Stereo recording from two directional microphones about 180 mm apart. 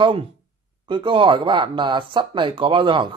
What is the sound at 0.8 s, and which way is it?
Speech, 30° right (ahead or behind).